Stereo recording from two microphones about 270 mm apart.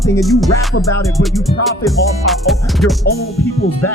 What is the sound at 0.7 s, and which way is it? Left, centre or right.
Music, left.